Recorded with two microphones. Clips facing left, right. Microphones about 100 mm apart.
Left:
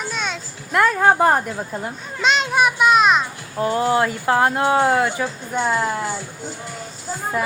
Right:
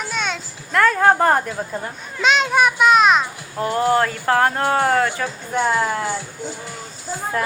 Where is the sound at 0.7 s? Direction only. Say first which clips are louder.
Right 1 dB; 15° left (ahead or behind); by 3.2 s centre (ahead or behind).